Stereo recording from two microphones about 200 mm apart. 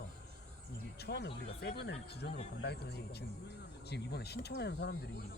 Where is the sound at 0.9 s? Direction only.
55° left (ahead or behind).